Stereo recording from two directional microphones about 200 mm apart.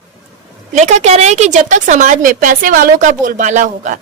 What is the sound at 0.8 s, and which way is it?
A woman's voice, 35° right (ahead or behind).